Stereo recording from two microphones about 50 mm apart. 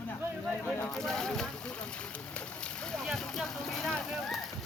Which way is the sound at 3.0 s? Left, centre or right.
Centre.